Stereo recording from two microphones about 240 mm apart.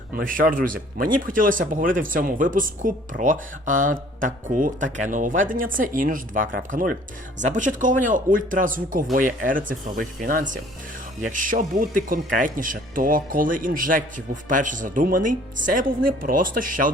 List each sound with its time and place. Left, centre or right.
0.1 s speech: right